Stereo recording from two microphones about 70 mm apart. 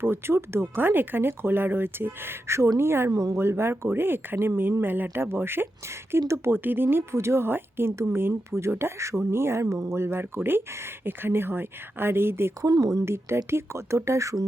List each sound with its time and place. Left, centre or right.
0.0 s speech: right
3.1 s speech: right
3.3 s speech: right
12.8 s speech: right
13.1 s speech: right